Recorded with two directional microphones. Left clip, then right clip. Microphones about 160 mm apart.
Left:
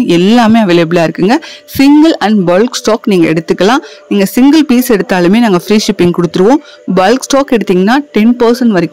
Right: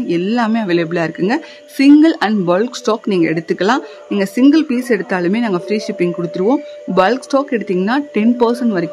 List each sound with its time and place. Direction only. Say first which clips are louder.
0.0 s speech: left 9 dB; 65° left (ahead or behind)